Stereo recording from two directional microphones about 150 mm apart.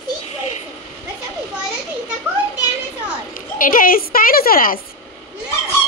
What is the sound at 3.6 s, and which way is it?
A woman's voice, 70° left (ahead or behind).